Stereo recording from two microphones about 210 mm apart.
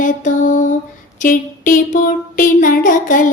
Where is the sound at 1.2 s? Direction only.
40° left (ahead or behind).